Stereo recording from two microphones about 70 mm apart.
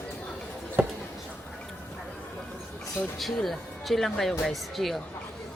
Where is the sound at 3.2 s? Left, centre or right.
Centre.